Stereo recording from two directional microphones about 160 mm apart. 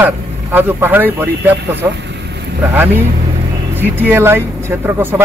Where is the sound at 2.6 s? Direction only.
15° right (ahead or behind).